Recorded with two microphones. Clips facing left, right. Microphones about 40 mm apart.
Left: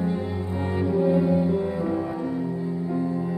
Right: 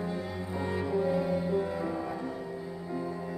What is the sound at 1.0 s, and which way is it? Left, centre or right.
Music, centre.